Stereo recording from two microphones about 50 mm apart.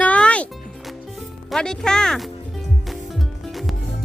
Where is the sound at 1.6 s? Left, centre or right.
Centre.